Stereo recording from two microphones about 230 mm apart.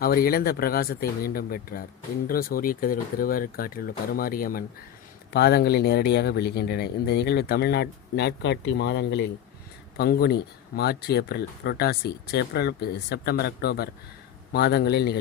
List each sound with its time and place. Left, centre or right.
0.0 s speech: left